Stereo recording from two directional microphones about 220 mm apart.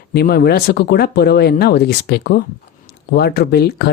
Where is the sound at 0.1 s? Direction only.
45° left (ahead or behind).